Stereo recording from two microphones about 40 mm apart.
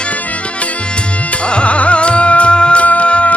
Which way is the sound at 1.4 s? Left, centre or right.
Left.